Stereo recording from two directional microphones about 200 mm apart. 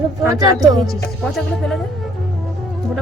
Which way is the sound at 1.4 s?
Centre (ahead or behind).